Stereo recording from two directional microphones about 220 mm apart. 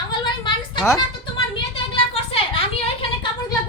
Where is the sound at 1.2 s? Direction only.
25° left (ahead or behind).